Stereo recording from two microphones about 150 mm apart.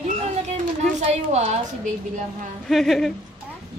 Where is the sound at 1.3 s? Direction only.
45° right (ahead or behind).